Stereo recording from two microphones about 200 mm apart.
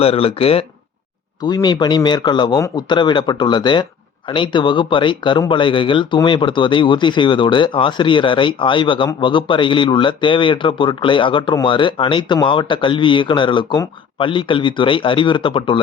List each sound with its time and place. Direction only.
0.0 s speech: 30° left (ahead or behind)